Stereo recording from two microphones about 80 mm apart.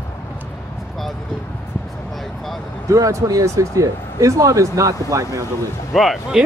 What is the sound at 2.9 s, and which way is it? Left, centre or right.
Speech, right.